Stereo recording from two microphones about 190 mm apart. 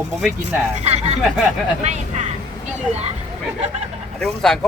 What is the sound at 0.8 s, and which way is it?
Speech, 35° right (ahead or behind).